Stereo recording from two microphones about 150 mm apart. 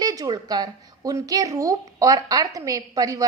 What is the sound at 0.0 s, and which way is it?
Speech, 25° right (ahead or behind).